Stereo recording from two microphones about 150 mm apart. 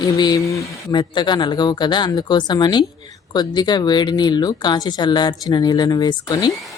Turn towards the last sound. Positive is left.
turn(degrees=25)  # may be behind; listen again after turning